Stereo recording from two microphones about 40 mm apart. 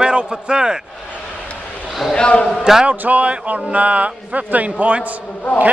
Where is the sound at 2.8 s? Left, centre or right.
Right.